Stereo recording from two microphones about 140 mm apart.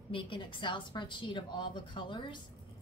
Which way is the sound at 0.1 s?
35° left (ahead or behind).